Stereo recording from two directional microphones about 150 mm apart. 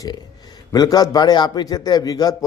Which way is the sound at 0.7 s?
25° left (ahead or behind).